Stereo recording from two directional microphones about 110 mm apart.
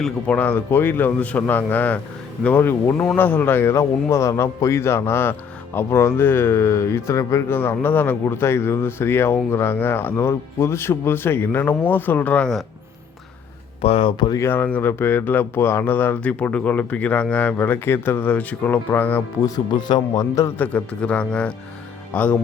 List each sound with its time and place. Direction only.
0.0 s a man's voice: 15° left (ahead or behind)
13.8 s speech: 60° left (ahead or behind)
14.3 s speech: 20° left (ahead or behind)
19.4 s speech: 35° left (ahead or behind)
20.3 s a man's voice: 25° left (ahead or behind)
20.7 s speech: 10° left (ahead or behind)